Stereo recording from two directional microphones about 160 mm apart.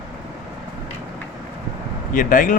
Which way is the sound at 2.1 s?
60° left (ahead or behind).